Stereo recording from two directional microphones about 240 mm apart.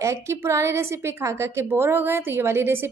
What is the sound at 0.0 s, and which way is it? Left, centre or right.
A woman's voice, centre.